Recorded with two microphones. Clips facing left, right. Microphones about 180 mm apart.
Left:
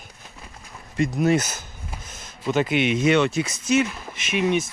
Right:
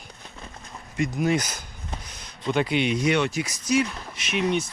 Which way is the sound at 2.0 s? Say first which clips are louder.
Left 2 dB; 50° left (ahead or behind).